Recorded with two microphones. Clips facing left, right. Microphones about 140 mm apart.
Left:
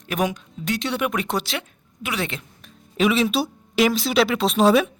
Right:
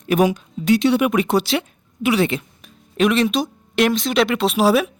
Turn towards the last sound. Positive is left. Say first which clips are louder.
# right 1 dB
turn(degrees=-5)  # may be behind; listen again after turning